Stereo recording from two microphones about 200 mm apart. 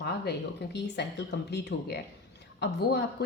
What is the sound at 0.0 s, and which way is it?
Speech, 55° left (ahead or behind).